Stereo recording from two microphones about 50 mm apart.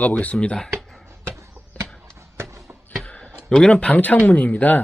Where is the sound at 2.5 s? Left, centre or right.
Right.